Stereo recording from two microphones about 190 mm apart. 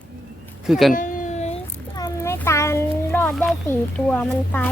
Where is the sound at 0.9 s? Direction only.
45° left (ahead or behind).